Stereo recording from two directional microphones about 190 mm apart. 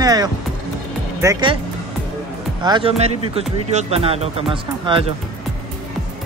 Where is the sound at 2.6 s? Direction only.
25° right (ahead or behind).